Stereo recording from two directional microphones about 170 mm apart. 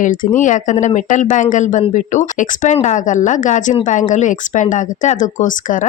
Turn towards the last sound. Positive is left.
turn(degrees=50)  # may be behind; listen again after turning